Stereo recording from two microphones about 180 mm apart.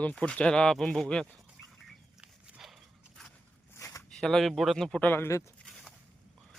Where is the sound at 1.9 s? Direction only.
5° right (ahead or behind).